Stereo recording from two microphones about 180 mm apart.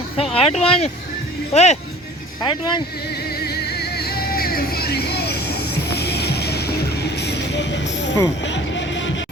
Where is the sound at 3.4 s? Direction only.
65° left (ahead or behind); by 8.1 s 80° left.